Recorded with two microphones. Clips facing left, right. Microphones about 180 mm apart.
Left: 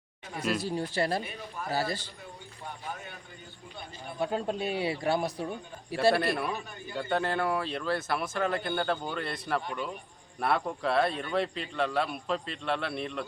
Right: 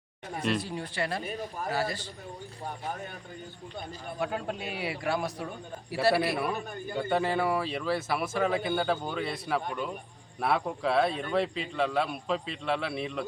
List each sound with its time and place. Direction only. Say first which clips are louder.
0.4 s a man's voice: even; 5° left (ahead or behind)
0.8 s a man's voice: left 3 dB; 35° left (ahead or behind)
1.2 s a man's voice: right 4 dB; 40° right (ahead or behind)
1.7 s a man's voice: left 1 dB; 30° left (ahead or behind)
2.6 s speech: right 3 dB; 45° right (ahead or behind)
4.2 s a man's voice: left 3 dB; 30° left (ahead or behind)
6.0 s a man's voice: even; 5° right (ahead or behind)
6.6 s speech: right 5 dB; 50° right (ahead or behind)
6.9 s a man's voice: right 2 dB; centre (ahead or behind)